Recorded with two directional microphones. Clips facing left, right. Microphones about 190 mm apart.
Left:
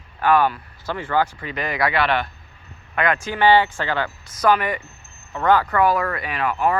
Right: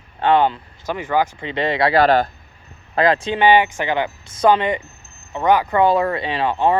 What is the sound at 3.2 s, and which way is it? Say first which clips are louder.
Speech: right 2 dB; 20° right (ahead or behind).